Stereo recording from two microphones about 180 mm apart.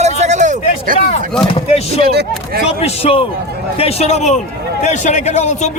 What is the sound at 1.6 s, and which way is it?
A man's voice, 35° left (ahead or behind).